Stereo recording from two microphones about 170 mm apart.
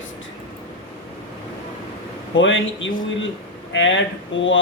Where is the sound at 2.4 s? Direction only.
90° left.